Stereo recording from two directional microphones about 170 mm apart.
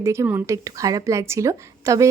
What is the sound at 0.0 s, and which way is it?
A woman's voice, 15° right (ahead or behind).